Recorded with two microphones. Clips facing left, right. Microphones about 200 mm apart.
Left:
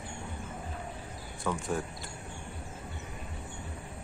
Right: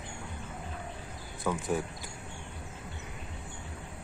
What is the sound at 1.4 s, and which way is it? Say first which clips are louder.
Speech: right 2 dB; centre (ahead or behind).